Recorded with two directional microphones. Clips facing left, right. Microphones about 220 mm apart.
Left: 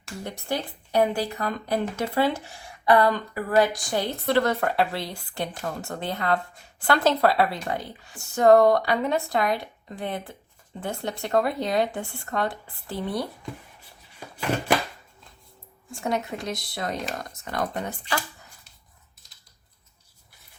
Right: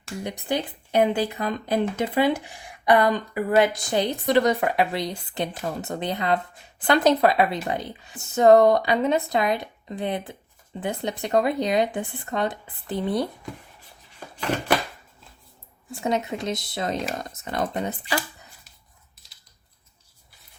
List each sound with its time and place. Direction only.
0.2 s speech: 15° right (ahead or behind)
15.9 s speech: 20° right (ahead or behind)